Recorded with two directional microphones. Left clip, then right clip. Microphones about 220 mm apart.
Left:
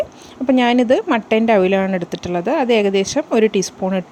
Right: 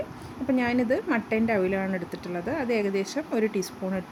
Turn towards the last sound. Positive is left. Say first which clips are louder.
# left 11 dB
turn(degrees=35)  # may be behind; listen again after turning